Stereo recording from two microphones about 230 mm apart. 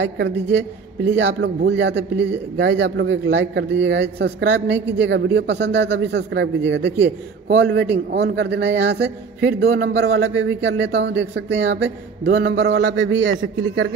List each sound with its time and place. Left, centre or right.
0.0 s speech: right